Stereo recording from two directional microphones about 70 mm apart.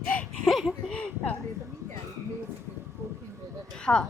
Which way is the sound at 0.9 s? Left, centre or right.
Centre.